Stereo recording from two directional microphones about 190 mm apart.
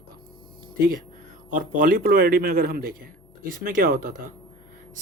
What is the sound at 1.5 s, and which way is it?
Speech, 45° right (ahead or behind).